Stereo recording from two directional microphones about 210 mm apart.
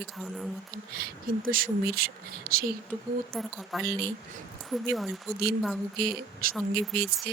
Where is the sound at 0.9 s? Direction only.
45° right (ahead or behind).